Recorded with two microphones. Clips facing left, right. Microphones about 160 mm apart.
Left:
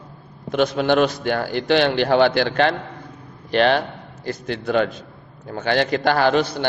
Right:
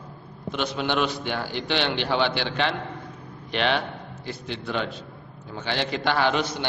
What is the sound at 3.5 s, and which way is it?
A man's voice, 40° left (ahead or behind).